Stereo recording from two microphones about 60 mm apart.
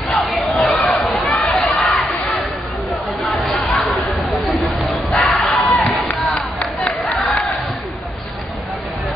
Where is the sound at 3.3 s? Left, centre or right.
Centre.